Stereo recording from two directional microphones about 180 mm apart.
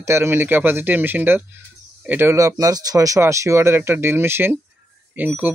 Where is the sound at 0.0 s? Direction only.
15° right (ahead or behind).